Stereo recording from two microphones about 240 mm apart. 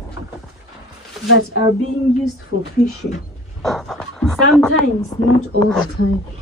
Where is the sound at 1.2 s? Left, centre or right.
Left.